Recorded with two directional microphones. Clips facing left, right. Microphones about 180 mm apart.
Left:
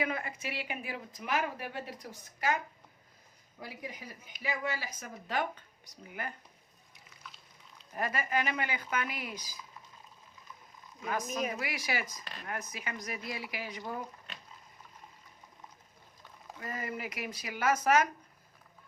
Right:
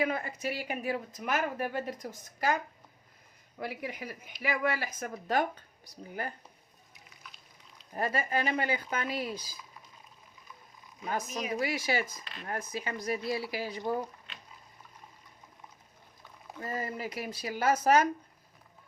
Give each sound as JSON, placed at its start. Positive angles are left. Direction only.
{"t": 0.0, "sound": "speech", "side_deg": -35}
{"t": 3.6, "sound": "speech", "side_deg": -70}
{"t": 7.9, "sound": "speech", "side_deg": -30}
{"t": 11.5, "sound": "speech", "side_deg": -30}
{"t": 16.6, "sound": "speech", "side_deg": -30}